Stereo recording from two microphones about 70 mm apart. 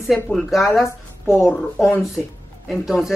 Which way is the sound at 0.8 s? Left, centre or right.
Left.